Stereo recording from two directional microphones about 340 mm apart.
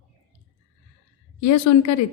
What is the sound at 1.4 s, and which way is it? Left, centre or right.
Speech, left.